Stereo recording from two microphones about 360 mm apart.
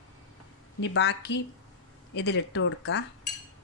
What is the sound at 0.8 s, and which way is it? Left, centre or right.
A woman's voice, left.